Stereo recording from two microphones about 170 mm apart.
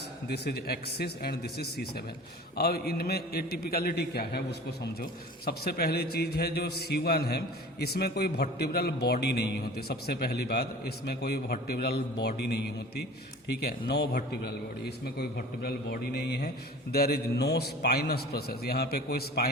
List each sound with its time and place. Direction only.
0.3 s a man's voice: 70° left (ahead or behind)